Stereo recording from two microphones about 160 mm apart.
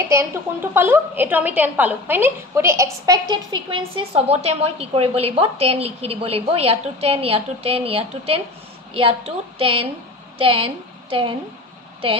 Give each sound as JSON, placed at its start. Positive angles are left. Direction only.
{"t": 0.1, "sound": "a woman's voice", "side_deg": -15}